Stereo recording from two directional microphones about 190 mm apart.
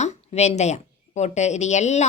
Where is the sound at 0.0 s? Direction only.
35° left (ahead or behind).